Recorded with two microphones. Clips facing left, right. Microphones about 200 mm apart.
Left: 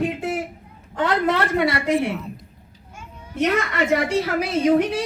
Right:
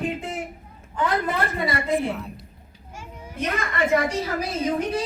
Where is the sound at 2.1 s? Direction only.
Centre (ahead or behind).